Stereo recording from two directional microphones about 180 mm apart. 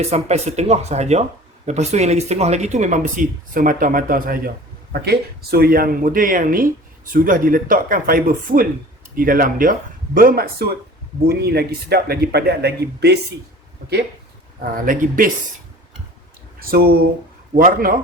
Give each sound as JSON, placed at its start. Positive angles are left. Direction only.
{"t": 0.0, "sound": "speech", "side_deg": -35}
{"t": 14.6, "sound": "speech", "side_deg": -50}
{"t": 16.6, "sound": "speech", "side_deg": -55}